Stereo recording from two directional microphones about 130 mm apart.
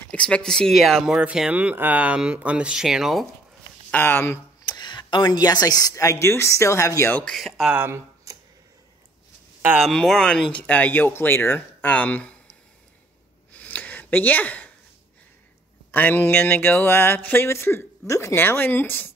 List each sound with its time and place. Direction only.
0.1 s speech: 10° left (ahead or behind)
3.9 s speech: 15° left (ahead or behind)
4.6 s speech: 35° left (ahead or behind)
7.2 s speech: 5° left (ahead or behind)
7.7 s a sound: 20° right (ahead or behind)
9.8 s speech: centre (ahead or behind)
13.5 s a sound: 10° left (ahead or behind)
15.9 s speech: 15° left (ahead or behind)